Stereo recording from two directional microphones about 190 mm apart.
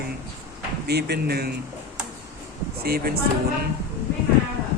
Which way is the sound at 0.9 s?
60° right (ahead or behind).